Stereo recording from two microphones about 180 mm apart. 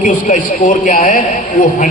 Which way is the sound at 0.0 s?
45° left (ahead or behind).